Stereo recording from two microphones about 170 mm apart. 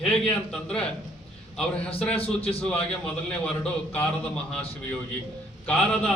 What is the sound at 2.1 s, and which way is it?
Speech, 35° left (ahead or behind).